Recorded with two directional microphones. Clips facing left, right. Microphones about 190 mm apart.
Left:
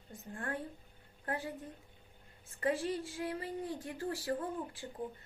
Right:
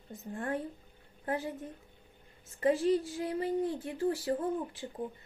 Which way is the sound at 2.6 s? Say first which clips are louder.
Right 7 dB; 25° right (ahead or behind).